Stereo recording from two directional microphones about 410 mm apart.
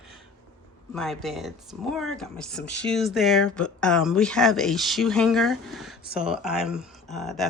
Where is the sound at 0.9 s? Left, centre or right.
Centre.